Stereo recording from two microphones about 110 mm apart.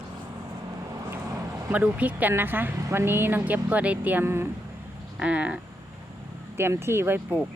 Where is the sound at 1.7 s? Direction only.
15° right (ahead or behind).